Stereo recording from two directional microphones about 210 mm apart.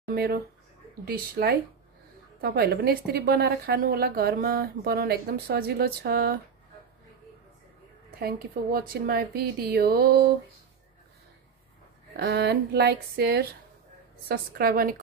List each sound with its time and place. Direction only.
0.1 s a woman's voice: 50° right (ahead or behind)
8.2 s a woman's voice: 45° right (ahead or behind)
12.2 s a woman's voice: 50° right (ahead or behind)